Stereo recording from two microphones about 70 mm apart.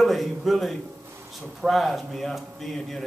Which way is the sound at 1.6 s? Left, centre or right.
Centre.